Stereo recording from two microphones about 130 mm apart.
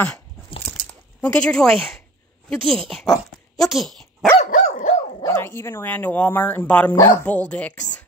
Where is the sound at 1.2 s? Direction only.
10° left (ahead or behind).